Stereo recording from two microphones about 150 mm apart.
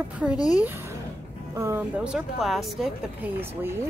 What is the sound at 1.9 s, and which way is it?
Speech, 5° right (ahead or behind).